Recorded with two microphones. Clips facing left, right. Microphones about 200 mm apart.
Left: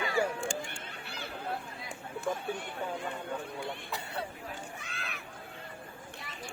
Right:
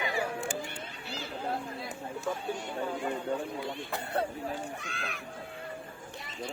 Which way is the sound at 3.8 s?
50° right (ahead or behind).